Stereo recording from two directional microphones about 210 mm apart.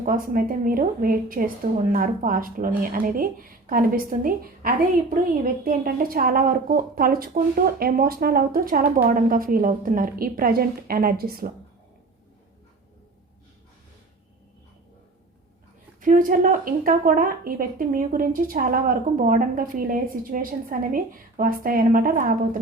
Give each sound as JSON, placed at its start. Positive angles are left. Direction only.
{"t": 0.0, "sound": "a woman's voice", "side_deg": -40}
{"t": 16.0, "sound": "speech", "side_deg": -40}